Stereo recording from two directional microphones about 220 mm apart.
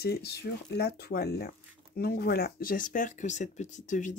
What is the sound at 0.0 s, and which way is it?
Speech, 45° left (ahead or behind).